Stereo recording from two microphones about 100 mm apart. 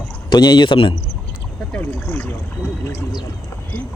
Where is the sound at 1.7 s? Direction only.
15° left (ahead or behind).